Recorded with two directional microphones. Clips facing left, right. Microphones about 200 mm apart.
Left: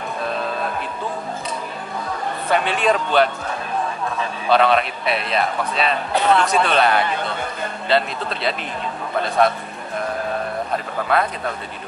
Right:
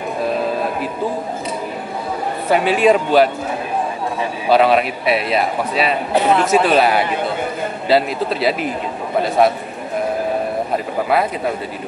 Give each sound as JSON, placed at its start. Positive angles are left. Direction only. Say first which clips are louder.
{"t": 0.3, "sound": "a sound", "louder": "right 5 dB", "side_deg": -10}
{"t": 2.5, "sound": "a man's voice", "louder": "right 6 dB", "side_deg": -5}
{"t": 11.1, "sound": "a man's voice", "louder": "right 2 dB", "side_deg": -5}